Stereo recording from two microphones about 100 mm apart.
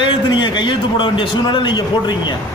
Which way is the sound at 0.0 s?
50° left (ahead or behind).